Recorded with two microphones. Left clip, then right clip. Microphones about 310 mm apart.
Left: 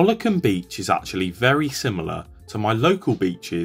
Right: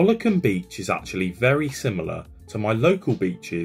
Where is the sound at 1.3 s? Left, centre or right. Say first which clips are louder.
Left 2 dB; centre.